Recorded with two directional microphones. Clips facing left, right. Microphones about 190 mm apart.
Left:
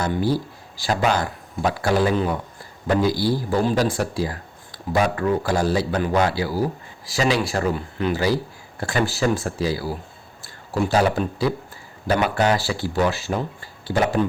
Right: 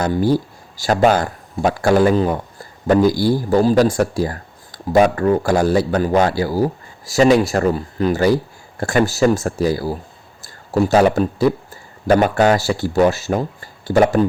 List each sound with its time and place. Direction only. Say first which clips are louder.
0.0 s a man's voice: right 5 dB; 45° right (ahead or behind)